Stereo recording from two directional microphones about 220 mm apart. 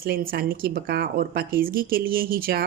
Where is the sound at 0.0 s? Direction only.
40° right (ahead or behind).